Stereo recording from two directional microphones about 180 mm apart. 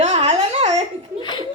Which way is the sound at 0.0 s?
35° right (ahead or behind).